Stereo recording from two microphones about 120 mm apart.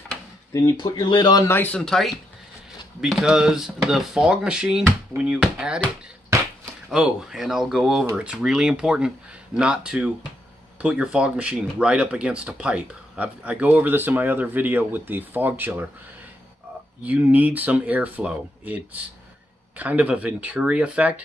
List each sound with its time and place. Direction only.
0.5 s speech: 25° left (ahead or behind)
1.0 s speech: 40° left (ahead or behind)
1.4 s speech: 15° left (ahead or behind)
1.8 s speech: 5° left (ahead or behind)
6.9 s speech: 5° right (ahead or behind)
17.0 s speech: 15° right (ahead or behind)